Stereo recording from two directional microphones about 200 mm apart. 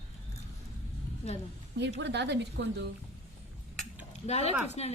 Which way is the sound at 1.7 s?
60° right (ahead or behind).